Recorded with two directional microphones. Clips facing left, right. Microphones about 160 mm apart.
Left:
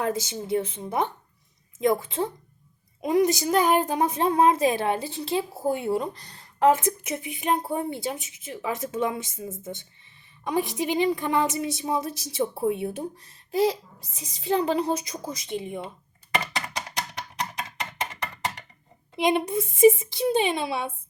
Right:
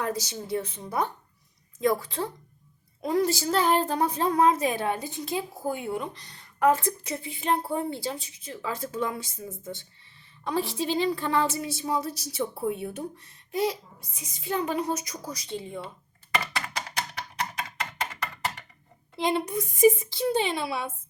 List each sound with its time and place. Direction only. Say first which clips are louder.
0.0 s a woman's voice: left 3 dB; 25° left (ahead or behind)
6.7 s a woman's voice: left 2 dB; 20° left (ahead or behind)
14.2 s a woman's voice: left 5 dB; 30° left (ahead or behind)
16.4 s a sound: left 1 dB; 20° left (ahead or behind)
19.1 s a woman's voice: left 3 dB; 15° left (ahead or behind)